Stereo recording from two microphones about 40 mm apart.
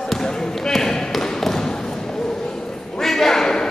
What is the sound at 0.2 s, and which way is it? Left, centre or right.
Basketball bounce, centre.